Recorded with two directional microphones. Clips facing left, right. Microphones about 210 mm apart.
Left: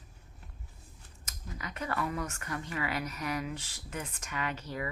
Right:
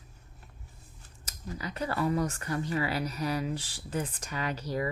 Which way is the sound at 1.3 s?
35° right (ahead or behind).